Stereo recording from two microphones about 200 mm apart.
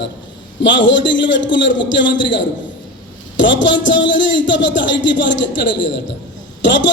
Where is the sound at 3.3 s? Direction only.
65° left (ahead or behind).